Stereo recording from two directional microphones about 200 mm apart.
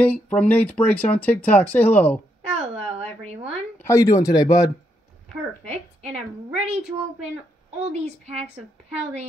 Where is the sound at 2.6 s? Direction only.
30° right (ahead or behind).